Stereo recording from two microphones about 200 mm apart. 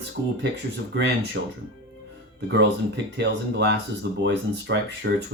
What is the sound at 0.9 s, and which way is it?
Speech, 60° right (ahead or behind).